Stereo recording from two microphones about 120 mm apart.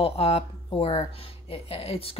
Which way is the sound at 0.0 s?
60° left (ahead or behind).